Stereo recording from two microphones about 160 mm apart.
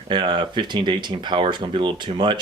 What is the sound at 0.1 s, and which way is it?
Speech, 30° right (ahead or behind).